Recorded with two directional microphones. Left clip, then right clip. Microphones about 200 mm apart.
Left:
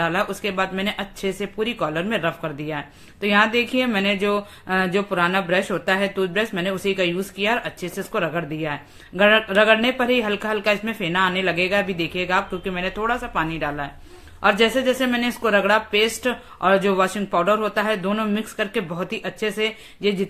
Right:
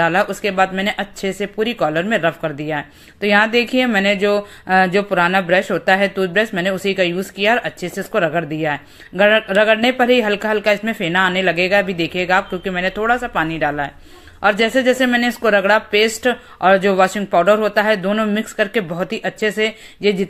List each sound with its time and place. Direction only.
0.0 s speech: 20° right (ahead or behind)